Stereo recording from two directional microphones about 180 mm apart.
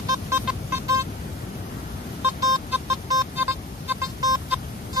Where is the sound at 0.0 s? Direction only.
20° right (ahead or behind).